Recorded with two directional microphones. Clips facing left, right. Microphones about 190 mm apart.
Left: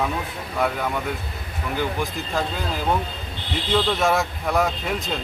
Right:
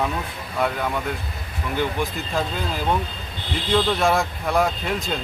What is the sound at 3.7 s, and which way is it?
Speech, centre (ahead or behind).